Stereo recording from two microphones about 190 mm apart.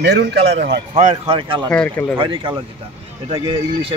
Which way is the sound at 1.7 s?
10° left (ahead or behind).